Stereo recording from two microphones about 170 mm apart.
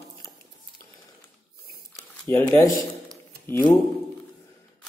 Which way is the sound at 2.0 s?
15° left (ahead or behind).